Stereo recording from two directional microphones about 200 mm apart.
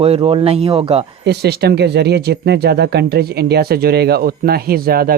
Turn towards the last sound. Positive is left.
turn(degrees=-50)  # may be behind; listen again after turning